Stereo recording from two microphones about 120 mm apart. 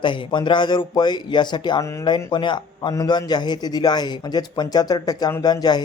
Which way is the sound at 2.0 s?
40° left (ahead or behind).